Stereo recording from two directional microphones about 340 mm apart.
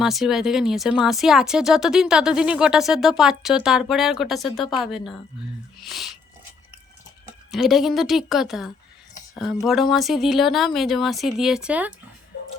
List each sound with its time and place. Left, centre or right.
0.0 s speech: centre
7.5 s speech: centre
12.3 s beatboxing: left